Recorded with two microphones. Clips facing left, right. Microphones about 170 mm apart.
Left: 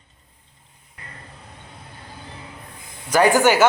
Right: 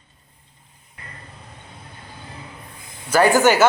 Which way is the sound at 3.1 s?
15° left (ahead or behind).